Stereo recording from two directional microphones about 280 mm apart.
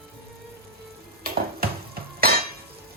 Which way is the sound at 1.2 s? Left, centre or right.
Right.